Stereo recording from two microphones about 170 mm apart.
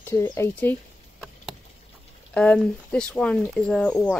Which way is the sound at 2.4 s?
5° left (ahead or behind).